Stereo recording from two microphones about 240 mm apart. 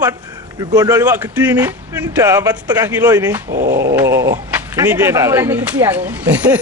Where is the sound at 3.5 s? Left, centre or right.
Right.